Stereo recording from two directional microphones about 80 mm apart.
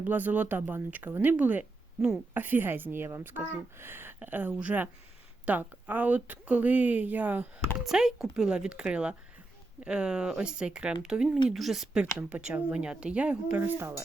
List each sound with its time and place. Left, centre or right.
0.0 s a woman's voice: right
7.9 s speech: centre
13.7 s a woman's voice: right